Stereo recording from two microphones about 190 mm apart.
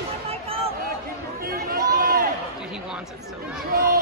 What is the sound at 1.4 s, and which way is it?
Chatter, 50° right (ahead or behind).